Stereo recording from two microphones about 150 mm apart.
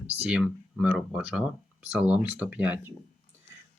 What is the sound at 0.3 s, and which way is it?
Speech, 10° right (ahead or behind).